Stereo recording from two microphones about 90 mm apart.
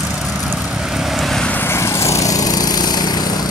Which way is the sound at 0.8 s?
5° right (ahead or behind).